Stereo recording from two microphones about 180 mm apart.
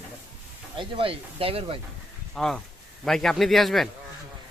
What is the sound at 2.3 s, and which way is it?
Speech, centre (ahead or behind).